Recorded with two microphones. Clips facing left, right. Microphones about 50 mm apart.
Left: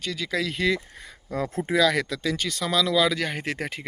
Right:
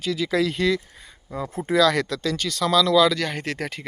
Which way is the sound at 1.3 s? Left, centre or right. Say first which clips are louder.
Left 2 dB; left.